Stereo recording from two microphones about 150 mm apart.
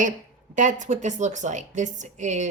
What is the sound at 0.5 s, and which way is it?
A woman's voice, 55° right (ahead or behind).